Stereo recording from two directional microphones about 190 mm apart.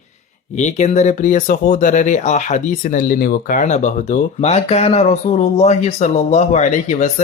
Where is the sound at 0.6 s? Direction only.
40° left (ahead or behind).